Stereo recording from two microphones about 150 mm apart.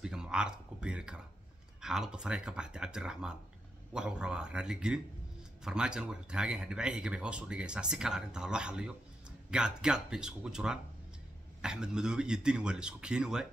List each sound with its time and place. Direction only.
0.0 s speech: 5° right (ahead or behind)